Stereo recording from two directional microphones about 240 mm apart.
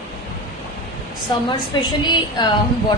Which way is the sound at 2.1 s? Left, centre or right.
Centre.